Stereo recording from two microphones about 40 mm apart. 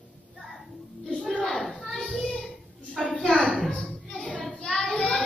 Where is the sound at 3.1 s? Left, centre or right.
Left.